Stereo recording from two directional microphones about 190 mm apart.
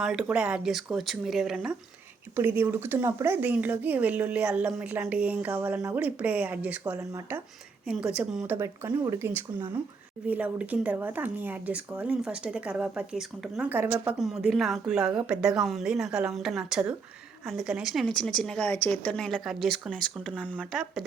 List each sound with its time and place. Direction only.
0.0 s a woman's voice: 5° right (ahead or behind)